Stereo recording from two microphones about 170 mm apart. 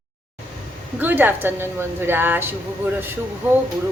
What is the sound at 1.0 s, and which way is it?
Speech, 10° right (ahead or behind).